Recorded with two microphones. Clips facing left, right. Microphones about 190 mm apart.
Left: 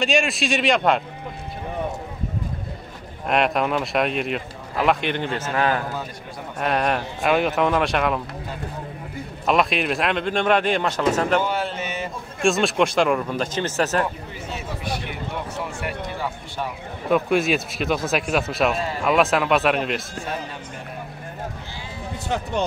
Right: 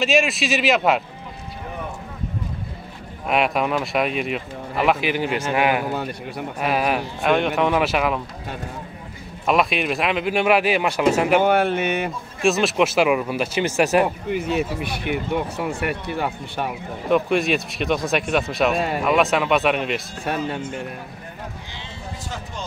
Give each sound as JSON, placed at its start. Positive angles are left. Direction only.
{"t": 0.0, "sound": "speech", "side_deg": 0}
{"t": 3.3, "sound": "speech", "side_deg": 0}
{"t": 9.5, "sound": "speech", "side_deg": 0}
{"t": 11.4, "sound": "speech", "side_deg": -60}
{"t": 12.4, "sound": "speech", "side_deg": 0}
{"t": 14.3, "sound": "speech", "side_deg": -65}
{"t": 17.1, "sound": "speech", "side_deg": 0}